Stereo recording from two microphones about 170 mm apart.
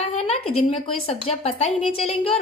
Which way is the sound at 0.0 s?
40° left (ahead or behind).